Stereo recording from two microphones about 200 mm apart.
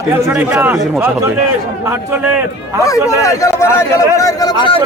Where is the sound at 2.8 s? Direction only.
15° left (ahead or behind).